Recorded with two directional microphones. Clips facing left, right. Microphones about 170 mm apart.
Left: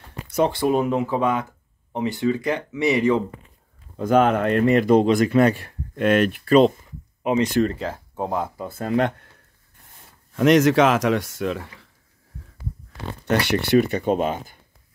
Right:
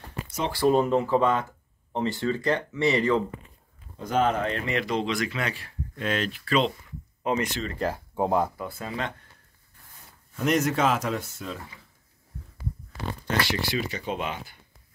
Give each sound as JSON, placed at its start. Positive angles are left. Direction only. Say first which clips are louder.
{"t": 0.7, "sound": "speech", "louder": "left 1 dB", "side_deg": 10}
{"t": 3.9, "sound": "speech", "louder": "left 7 dB", "side_deg": 55}
{"t": 7.8, "sound": "speech", "louder": "right 1 dB", "side_deg": -10}
{"t": 8.6, "sound": "speech", "louder": "left 10 dB", "side_deg": 50}
{"t": 10.3, "sound": "speech", "louder": "left 9 dB", "side_deg": 90}
{"t": 13.3, "sound": "speech", "louder": "left 9 dB", "side_deg": 60}